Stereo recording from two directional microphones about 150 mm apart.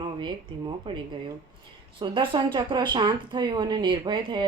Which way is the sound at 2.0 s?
30° right (ahead or behind).